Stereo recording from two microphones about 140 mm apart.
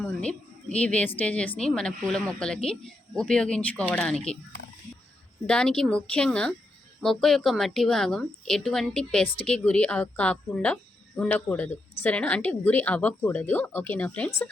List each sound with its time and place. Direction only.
0.0 s a woman's voice: 5° left (ahead or behind)
5.5 s a woman's voice: 5° left (ahead or behind)
9.2 s speech: 40° left (ahead or behind)
9.5 s a woman's voice: 10° left (ahead or behind)